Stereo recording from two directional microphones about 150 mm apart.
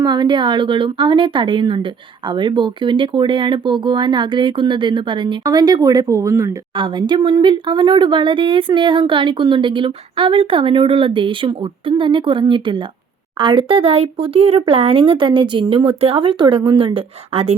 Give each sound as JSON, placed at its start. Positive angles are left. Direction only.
{"t": 0.0, "sound": "a woman's voice", "side_deg": -30}
{"t": 6.7, "sound": "a woman's voice", "side_deg": -30}